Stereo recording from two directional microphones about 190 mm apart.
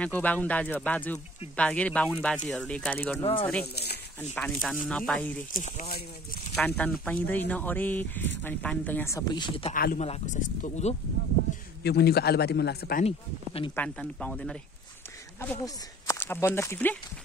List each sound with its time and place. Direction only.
0.0 s speech: 10° left (ahead or behind)
3.2 s speech: 25° left (ahead or behind)
3.7 s a man's voice: 60° left (ahead or behind)
4.2 s speech: 5° left (ahead or behind)
5.5 s speech: 45° left (ahead or behind)
6.5 s speech: 5° left (ahead or behind); by 11.0 s 40° left (ahead or behind)
11.8 s a man's voice: 55° left (ahead or behind)
13.0 s speech: 30° left (ahead or behind)
13.7 s speech: 5° left (ahead or behind)
15.4 s speech: 15° left (ahead or behind)